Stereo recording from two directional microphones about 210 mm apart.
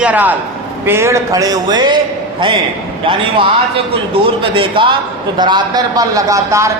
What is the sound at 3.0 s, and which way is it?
A man's voice, 25° right (ahead or behind).